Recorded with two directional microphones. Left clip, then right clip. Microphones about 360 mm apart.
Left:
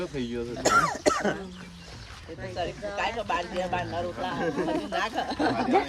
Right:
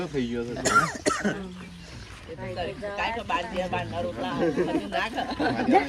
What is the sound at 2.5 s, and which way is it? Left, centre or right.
Speech, left.